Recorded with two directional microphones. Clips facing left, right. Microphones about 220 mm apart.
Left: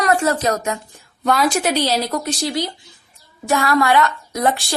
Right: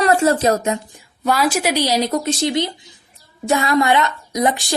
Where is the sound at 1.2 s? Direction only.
5° right (ahead or behind).